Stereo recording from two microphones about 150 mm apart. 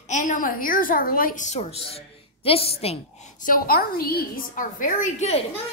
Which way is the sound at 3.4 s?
75° left (ahead or behind).